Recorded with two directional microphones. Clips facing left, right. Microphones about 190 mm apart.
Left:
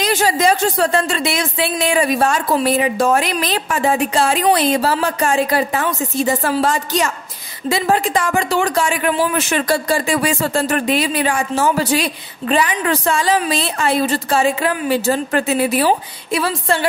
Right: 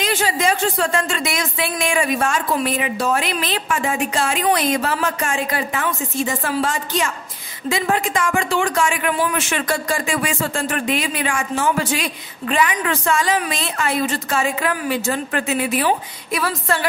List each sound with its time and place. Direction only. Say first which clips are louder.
0.0 s speech: left 4 dB; 40° left (ahead or behind)